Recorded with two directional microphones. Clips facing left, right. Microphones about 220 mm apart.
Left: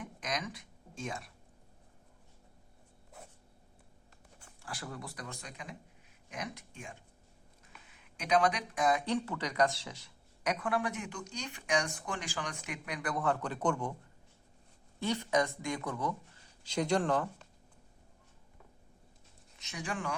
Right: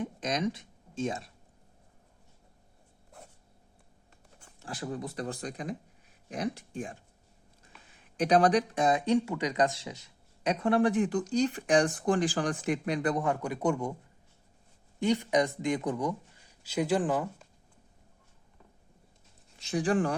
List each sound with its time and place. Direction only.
0.0 s speech: 25° right (ahead or behind)
4.6 s speech: 20° right (ahead or behind)
14.9 s speech: 15° right (ahead or behind)
19.5 s speech: 30° right (ahead or behind)